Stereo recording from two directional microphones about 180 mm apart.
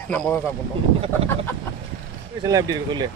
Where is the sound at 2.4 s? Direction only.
20° right (ahead or behind).